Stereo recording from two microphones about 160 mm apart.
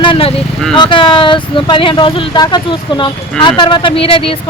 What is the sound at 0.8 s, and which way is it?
Speech, 30° left (ahead or behind).